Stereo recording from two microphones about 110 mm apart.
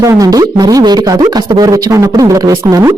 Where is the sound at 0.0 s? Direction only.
30° right (ahead or behind).